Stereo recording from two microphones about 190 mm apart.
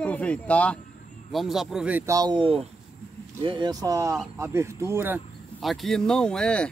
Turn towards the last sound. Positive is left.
turn(degrees=5)  # may be behind; listen again after turning